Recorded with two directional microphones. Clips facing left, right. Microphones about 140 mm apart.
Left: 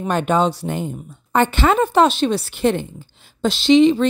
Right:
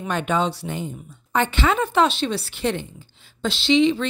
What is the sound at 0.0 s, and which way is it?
Speech, 40° left (ahead or behind).